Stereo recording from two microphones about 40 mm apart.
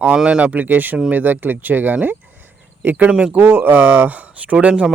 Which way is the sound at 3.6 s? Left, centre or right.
Right.